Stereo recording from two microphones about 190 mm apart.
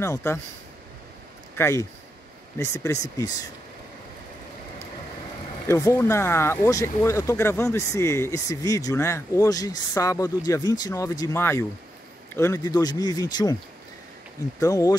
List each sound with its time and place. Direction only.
0.0 s speech: 15° left (ahead or behind)
1.5 s speech: 15° left (ahead or behind)
5.7 s speech: 15° left (ahead or behind)
14.6 s speech: 15° left (ahead or behind)